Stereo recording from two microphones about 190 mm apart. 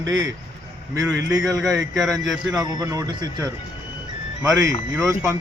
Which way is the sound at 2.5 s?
20° right (ahead or behind).